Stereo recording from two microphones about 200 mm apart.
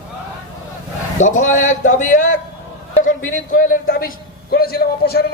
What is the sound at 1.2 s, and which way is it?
A man's voice, 40° left (ahead or behind).